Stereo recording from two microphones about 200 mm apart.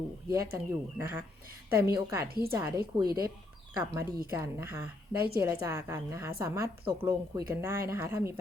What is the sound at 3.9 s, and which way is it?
Speech, 10° right (ahead or behind).